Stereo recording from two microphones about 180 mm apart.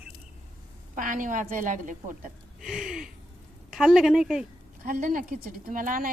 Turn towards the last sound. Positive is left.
turn(degrees=-50)  # may be behind; listen again after turning